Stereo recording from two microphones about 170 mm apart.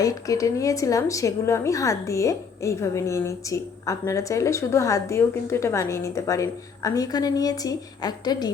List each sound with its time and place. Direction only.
0.0 s a woman's voice: 20° left (ahead or behind)